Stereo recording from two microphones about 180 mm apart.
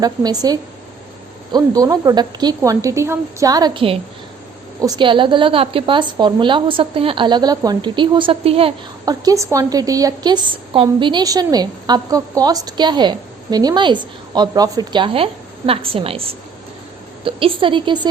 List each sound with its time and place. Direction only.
0.0 s a woman's voice: 20° right (ahead or behind)
9.0 s a woman's voice: 20° right (ahead or behind)
17.2 s a woman's voice: 30° right (ahead or behind)